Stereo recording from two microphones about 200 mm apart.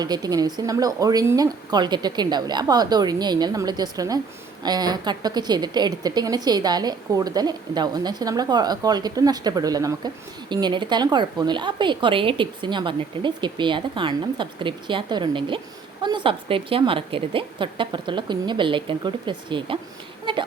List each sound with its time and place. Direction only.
0.0 s speech: 20° right (ahead or behind)